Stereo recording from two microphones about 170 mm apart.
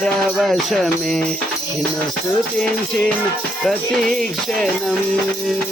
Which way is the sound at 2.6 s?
5° left (ahead or behind).